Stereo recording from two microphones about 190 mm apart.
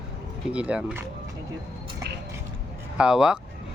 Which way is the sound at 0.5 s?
5° right (ahead or behind).